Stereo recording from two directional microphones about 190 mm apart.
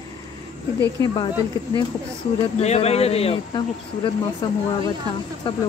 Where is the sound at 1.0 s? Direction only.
20° left (ahead or behind).